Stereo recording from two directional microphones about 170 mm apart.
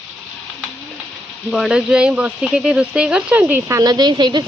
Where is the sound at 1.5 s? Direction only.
5° right (ahead or behind); by 4.4 s 25° right (ahead or behind).